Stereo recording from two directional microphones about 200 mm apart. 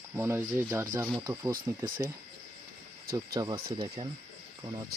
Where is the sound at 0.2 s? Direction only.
15° right (ahead or behind).